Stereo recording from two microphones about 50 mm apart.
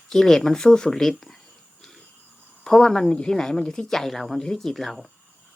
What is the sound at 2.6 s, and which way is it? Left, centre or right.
A woman's voice, centre.